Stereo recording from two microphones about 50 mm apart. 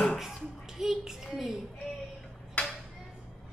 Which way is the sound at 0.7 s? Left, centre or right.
Centre.